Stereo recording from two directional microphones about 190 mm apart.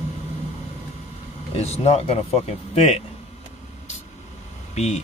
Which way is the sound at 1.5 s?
35° left (ahead or behind).